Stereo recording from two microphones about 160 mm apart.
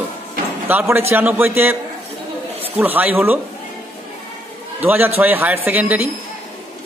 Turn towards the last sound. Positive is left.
turn(degrees=-10)  # may be behind; listen again after turning